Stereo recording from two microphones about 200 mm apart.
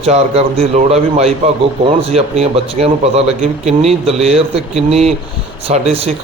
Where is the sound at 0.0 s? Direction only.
30° right (ahead or behind).